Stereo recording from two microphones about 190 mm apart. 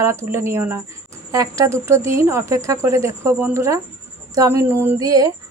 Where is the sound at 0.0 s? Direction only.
15° right (ahead or behind).